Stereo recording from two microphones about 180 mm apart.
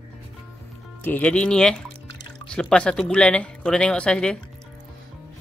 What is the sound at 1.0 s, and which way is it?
Speech, 10° left (ahead or behind).